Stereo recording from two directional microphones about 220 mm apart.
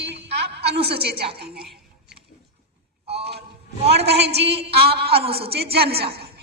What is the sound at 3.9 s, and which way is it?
A woman's voice, 50° right (ahead or behind).